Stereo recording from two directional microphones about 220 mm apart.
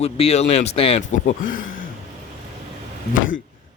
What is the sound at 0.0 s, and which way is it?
Speech, 30° left (ahead or behind).